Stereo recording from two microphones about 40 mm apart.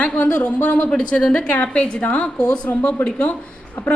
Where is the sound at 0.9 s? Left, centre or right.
Left.